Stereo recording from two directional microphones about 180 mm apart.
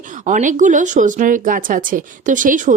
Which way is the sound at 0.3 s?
45° right (ahead or behind).